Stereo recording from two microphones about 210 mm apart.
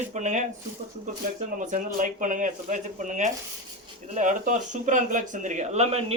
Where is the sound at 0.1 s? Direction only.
35° right (ahead or behind).